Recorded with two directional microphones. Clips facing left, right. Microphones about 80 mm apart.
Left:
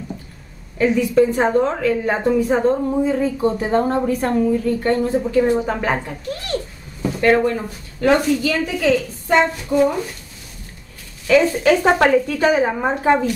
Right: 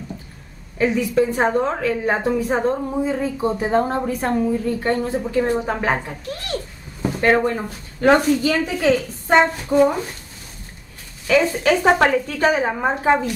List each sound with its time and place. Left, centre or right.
0.7 s a woman's voice: centre
7.0 s a sound: right
8.0 s a woman's voice: right
11.2 s a woman's voice: centre